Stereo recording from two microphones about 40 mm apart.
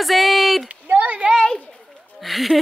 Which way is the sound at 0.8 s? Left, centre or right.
Right.